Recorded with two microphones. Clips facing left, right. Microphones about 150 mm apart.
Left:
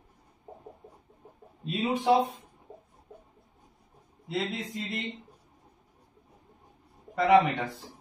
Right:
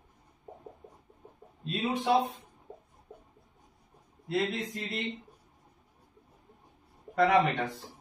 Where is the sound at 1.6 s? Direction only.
10° left (ahead or behind).